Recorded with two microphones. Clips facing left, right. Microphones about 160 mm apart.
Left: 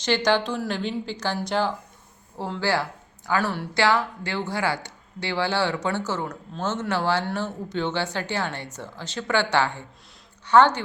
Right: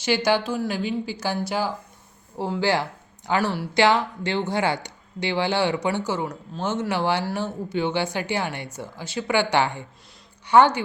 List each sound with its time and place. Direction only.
0.0 s a woman's voice: 10° right (ahead or behind)